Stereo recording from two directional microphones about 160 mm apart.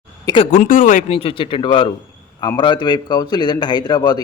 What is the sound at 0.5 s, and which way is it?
A man's voice, 55° left (ahead or behind).